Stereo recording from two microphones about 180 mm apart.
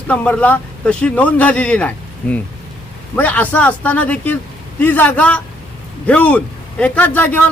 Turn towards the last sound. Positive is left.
turn(degrees=10)  # may be behind; listen again after turning